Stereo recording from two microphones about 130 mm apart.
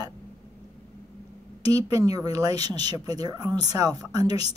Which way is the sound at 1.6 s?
30° right (ahead or behind).